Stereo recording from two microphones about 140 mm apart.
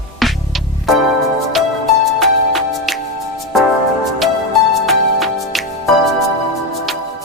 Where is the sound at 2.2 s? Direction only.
Centre (ahead or behind).